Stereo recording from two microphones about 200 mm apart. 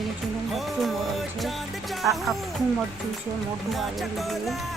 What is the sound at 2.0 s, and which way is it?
Speech, centre (ahead or behind).